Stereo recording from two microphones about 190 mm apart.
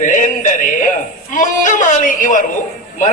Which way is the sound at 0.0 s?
45° left (ahead or behind).